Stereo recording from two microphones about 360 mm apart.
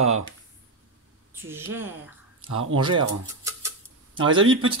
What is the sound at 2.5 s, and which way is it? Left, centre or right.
Speech, right.